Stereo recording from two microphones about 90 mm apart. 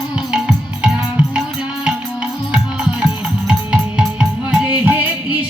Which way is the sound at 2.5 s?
10° right (ahead or behind).